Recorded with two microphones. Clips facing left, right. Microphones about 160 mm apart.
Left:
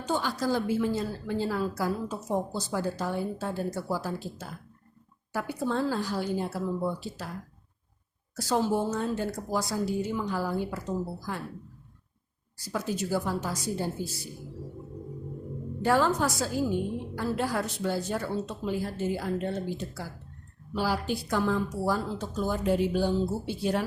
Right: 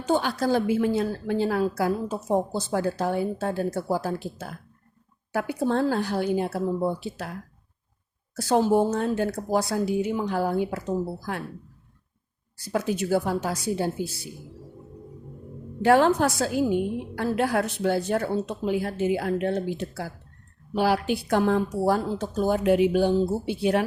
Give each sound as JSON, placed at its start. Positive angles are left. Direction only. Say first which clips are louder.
{"t": 0.1, "sound": "a woman's voice", "louder": "right 5 dB", "side_deg": -65}
{"t": 8.4, "sound": "a woman's voice", "louder": "right 6 dB", "side_deg": -55}
{"t": 12.5, "sound": "a woman's voice", "louder": "right 5 dB", "side_deg": -65}
{"t": 15.8, "sound": "a woman's voice", "louder": "right 6 dB", "side_deg": -65}